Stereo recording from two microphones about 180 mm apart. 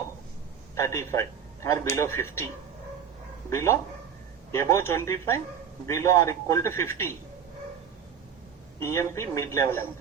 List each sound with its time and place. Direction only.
0.8 s a man's voice: 15° left (ahead or behind)
3.5 s a man's voice: 15° left (ahead or behind)
8.8 s a man's voice: 15° left (ahead or behind)